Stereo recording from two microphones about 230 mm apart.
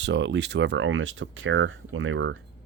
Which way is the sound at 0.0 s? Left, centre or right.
Right.